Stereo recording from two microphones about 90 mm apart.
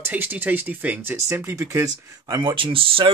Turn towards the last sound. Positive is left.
turn(degrees=-85)